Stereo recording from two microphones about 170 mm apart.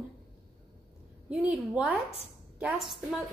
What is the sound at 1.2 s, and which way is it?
A woman's voice, 5° right (ahead or behind).